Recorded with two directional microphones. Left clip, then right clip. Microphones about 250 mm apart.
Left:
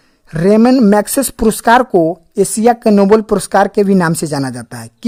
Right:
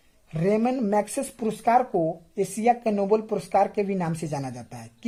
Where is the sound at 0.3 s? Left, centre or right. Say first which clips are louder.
Left 14 dB; left.